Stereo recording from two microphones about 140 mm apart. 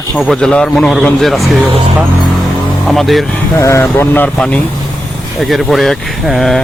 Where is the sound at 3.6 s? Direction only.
20° left (ahead or behind).